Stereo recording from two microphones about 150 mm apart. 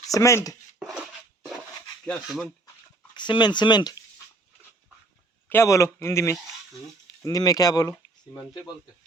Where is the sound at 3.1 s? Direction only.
30° left (ahead or behind).